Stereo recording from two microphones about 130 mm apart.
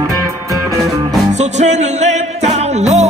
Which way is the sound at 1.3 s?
60° right (ahead or behind).